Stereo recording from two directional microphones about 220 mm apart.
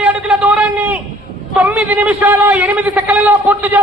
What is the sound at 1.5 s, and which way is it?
A man's voice, 5° right (ahead or behind).